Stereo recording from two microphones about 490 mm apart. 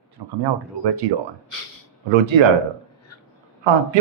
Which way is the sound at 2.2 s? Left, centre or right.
Right.